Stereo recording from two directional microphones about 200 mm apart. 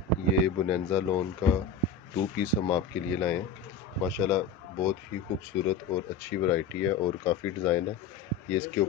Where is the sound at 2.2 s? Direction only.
20° left (ahead or behind).